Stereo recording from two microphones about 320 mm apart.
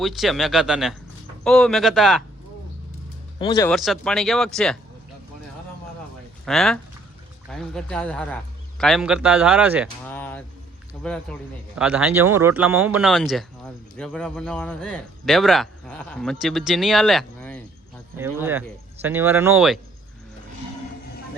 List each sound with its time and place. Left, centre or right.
0.0 s speech: centre
3.3 s speech: centre
6.4 s speech: centre
10.1 s a sound: centre
11.0 s speech: centre